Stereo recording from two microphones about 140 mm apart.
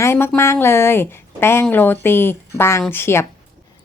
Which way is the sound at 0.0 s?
15° left (ahead or behind).